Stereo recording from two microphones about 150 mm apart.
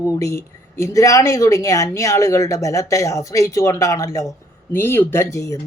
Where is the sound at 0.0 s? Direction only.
20° left (ahead or behind).